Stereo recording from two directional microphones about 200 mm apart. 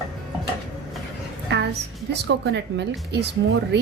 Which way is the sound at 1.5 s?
60° right (ahead or behind).